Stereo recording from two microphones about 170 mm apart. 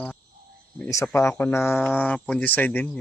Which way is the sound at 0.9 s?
15° left (ahead or behind).